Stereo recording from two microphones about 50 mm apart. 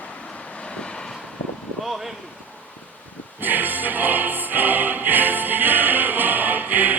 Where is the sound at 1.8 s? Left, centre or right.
Centre.